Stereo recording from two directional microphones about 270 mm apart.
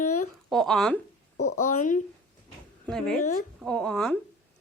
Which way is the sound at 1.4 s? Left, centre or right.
Left.